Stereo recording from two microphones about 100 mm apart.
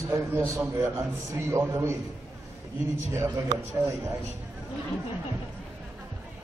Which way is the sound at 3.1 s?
30° right (ahead or behind).